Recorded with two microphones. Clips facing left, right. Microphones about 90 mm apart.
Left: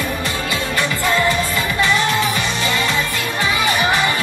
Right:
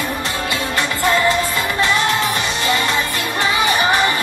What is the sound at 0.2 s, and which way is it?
Music, 20° right (ahead or behind).